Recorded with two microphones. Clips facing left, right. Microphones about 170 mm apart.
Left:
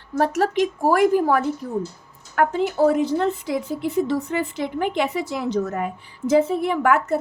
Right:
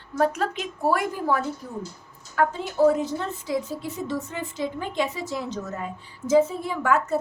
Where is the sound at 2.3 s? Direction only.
65° left (ahead or behind).